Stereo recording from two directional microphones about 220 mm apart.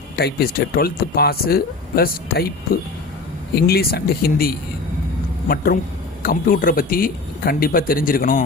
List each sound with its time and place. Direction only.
0.2 s speech: 45° left (ahead or behind)
3.5 s speech: 45° left (ahead or behind)
6.2 s a man's voice: 40° left (ahead or behind)